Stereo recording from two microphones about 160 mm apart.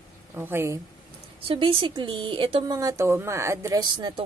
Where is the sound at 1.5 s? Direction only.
35° right (ahead or behind).